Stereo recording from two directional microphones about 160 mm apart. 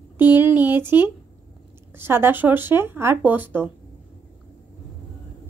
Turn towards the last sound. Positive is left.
turn(degrees=-10)  # may be behind; listen again after turning